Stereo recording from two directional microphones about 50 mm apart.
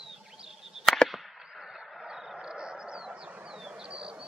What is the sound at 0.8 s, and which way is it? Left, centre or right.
Fireworks, centre.